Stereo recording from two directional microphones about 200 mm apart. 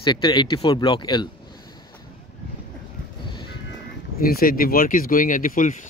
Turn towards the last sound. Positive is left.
turn(degrees=40)  # may be behind; listen again after turning